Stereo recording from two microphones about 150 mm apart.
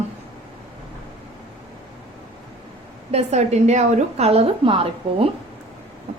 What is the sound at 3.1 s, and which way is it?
A woman's voice, 50° right (ahead or behind).